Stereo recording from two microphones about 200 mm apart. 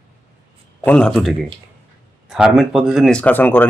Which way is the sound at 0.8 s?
5° left (ahead or behind).